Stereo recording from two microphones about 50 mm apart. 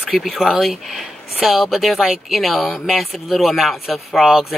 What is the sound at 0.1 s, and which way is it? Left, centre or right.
Speech, centre.